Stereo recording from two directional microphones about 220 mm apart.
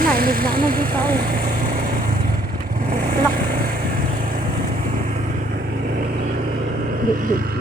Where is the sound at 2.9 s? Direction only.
40° right (ahead or behind).